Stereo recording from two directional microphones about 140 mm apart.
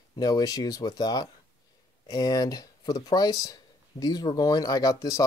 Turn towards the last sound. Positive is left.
turn(degrees=25)  # may be behind; listen again after turning